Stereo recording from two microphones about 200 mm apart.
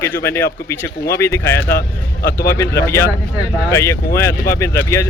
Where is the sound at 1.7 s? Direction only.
50° left (ahead or behind).